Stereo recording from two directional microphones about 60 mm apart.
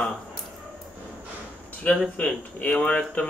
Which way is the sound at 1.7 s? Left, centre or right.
Left.